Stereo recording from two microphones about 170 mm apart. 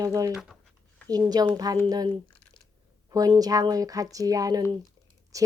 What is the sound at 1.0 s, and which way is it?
A woman's voice, 25° right (ahead or behind).